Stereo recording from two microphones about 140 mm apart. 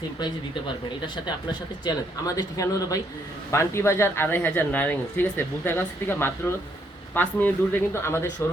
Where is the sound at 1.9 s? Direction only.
25° left (ahead or behind).